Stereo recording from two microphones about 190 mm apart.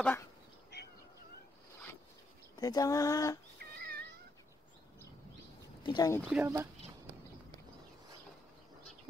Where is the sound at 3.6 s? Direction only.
55° right (ahead or behind).